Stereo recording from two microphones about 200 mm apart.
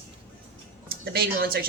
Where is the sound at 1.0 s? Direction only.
50° right (ahead or behind).